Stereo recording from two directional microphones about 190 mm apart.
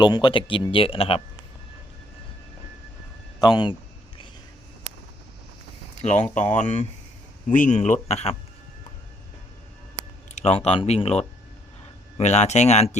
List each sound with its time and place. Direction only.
0.0 s speech: 25° left (ahead or behind)
3.4 s speech: 25° left (ahead or behind)
6.0 s speech: 40° left (ahead or behind)
10.3 s speech: 35° left (ahead or behind)